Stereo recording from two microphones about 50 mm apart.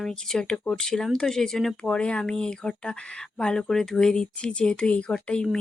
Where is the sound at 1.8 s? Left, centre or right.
Left.